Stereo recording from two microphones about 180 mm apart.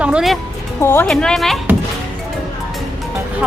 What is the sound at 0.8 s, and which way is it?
Speech, 10° left (ahead or behind).